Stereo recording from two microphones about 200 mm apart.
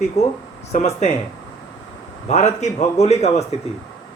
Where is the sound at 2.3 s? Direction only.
35° left (ahead or behind).